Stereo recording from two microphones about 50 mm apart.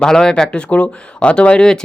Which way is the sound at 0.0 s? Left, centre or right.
Centre.